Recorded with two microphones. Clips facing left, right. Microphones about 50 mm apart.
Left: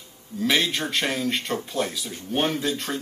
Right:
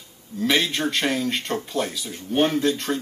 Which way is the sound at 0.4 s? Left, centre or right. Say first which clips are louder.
Right 1 dB; centre.